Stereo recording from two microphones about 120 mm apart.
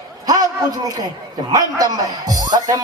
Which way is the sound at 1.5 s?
30° right (ahead or behind).